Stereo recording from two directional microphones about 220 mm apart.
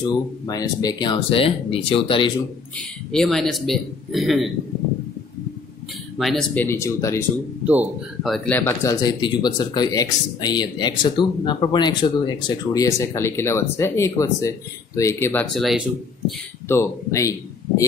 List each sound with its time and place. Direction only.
0.5 s speech: 15° left (ahead or behind)
3.1 s speech: centre (ahead or behind)
6.1 s speech: 5° left (ahead or behind)
7.6 s speech: 5° right (ahead or behind)
16.6 s speech: 10° left (ahead or behind)